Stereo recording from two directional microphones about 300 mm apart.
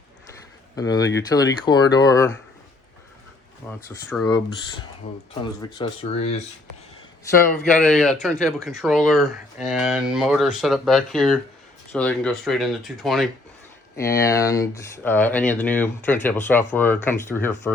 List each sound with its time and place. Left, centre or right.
0.8 s speech: centre
3.8 s speech: centre
7.5 s speech: centre